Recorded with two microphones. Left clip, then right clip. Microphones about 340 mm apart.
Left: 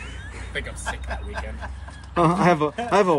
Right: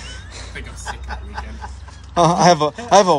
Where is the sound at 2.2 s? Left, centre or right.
Centre.